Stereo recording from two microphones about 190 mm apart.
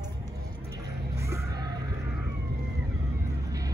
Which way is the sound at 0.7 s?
15° right (ahead or behind).